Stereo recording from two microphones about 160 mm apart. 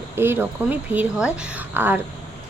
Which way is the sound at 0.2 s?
15° right (ahead or behind).